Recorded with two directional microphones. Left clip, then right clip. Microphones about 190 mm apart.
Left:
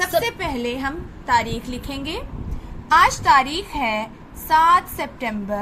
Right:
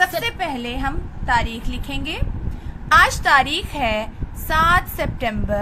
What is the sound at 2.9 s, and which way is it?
A woman's voice, 20° right (ahead or behind).